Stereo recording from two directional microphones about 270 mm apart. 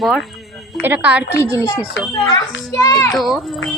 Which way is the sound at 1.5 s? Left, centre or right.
Centre.